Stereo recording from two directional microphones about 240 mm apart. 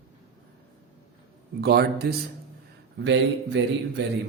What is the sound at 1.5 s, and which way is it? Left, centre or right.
A man's voice, right.